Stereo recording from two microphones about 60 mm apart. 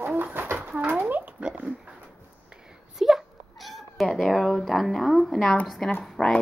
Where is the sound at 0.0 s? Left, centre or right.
Right.